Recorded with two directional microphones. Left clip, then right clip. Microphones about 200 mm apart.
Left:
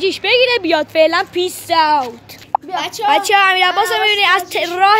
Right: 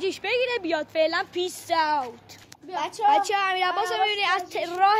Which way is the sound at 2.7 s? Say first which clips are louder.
Left 7 dB; 35° right (ahead or behind).